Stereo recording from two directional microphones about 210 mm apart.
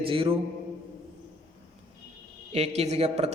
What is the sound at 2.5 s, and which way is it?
Speech, 30° right (ahead or behind).